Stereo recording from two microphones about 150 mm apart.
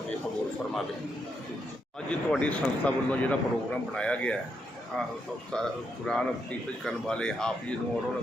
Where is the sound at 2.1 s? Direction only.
10° left (ahead or behind).